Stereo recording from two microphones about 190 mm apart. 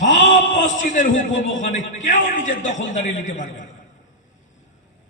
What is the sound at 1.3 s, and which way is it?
Speech, 80° left.